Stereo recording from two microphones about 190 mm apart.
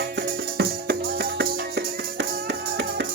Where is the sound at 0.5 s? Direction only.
60° right (ahead or behind).